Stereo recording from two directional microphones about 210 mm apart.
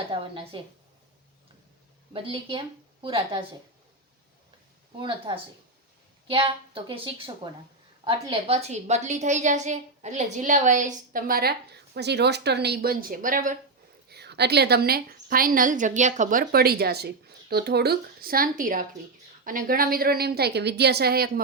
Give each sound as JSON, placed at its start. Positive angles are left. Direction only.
{"t": 0.1, "sound": "a woman's voice", "side_deg": -25}
{"t": 2.1, "sound": "a woman's voice", "side_deg": -25}
{"t": 4.9, "sound": "a woman's voice", "side_deg": -25}
{"t": 14.1, "sound": "a woman's voice", "side_deg": -50}